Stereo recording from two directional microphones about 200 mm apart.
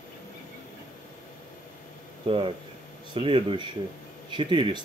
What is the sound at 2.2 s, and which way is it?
Speech, 25° right (ahead or behind).